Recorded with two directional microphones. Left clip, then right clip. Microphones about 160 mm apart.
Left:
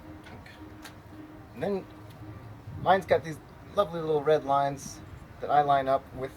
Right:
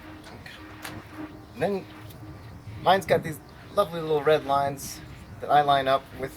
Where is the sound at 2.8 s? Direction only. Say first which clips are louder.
Right 2 dB; 5° right (ahead or behind).